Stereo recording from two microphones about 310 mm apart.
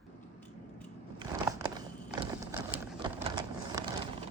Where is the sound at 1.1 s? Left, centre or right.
Centre.